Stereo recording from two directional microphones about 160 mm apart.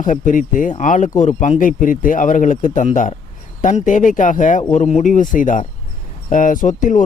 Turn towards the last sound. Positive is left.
turn(degrees=55)  # may be behind; listen again after turning